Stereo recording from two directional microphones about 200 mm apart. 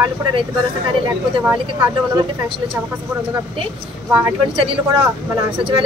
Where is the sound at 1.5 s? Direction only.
10° right (ahead or behind).